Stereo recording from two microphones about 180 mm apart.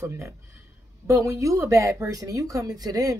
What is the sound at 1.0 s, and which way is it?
Speech, 15° right (ahead or behind).